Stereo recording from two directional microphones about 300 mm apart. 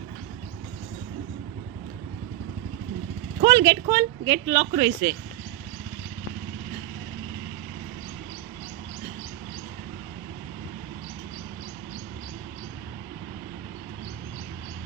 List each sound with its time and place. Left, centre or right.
3.4 s speech: centre